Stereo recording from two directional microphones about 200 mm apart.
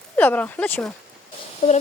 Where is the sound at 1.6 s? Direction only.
40° left (ahead or behind).